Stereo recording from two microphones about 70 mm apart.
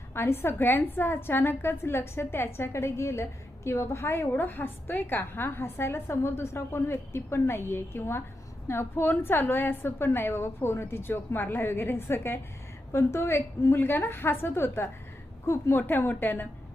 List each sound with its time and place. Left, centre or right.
0.1 s a woman's voice: left
15.8 s a woman's voice: left